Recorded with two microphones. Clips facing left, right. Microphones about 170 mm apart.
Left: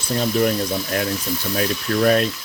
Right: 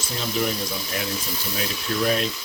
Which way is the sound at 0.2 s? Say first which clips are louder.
Left 6 dB; 55° left (ahead or behind).